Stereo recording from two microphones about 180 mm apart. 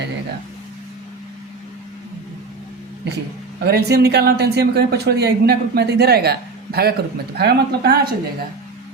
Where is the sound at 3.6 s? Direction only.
65° right (ahead or behind).